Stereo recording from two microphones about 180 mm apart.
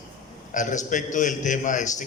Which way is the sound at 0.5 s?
45° left (ahead or behind).